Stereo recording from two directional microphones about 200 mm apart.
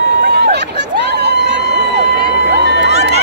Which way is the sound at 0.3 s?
55° right (ahead or behind).